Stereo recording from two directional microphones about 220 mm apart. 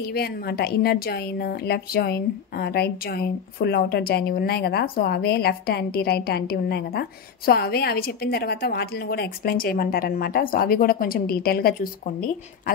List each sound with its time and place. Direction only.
0.0 s a woman's voice: 45° left (ahead or behind)